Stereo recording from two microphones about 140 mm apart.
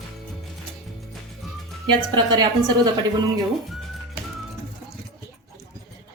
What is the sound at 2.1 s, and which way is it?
Speech, 30° right (ahead or behind).